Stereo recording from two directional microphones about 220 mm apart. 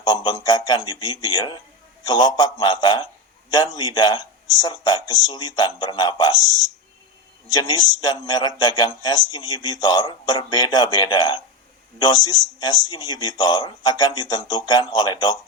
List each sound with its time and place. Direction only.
0.0 s a man's voice: 20° left (ahead or behind)
7.5 s a man's voice: 20° left (ahead or behind)